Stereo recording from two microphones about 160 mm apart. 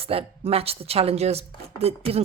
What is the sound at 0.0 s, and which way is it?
Speech, 40° right (ahead or behind).